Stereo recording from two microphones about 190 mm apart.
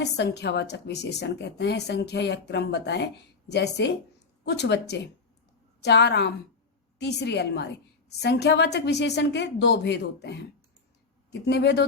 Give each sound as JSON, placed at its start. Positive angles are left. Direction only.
{"t": 0.0, "sound": "a woman's voice", "side_deg": 60}